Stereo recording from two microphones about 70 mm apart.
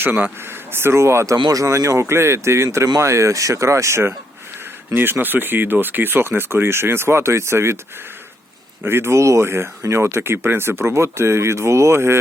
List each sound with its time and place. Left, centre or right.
0.0 s speech: right
1.4 s speech: right
8.8 s speech: right